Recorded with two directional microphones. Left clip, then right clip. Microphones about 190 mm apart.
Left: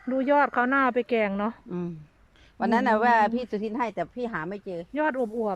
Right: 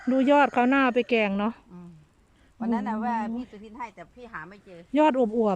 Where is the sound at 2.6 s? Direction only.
55° left (ahead or behind); by 4.9 s 35° left (ahead or behind).